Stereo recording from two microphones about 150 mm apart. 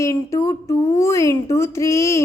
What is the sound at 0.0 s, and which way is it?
A woman's voice, 20° left (ahead or behind).